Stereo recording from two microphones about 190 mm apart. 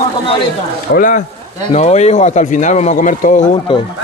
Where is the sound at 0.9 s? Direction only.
45° left (ahead or behind).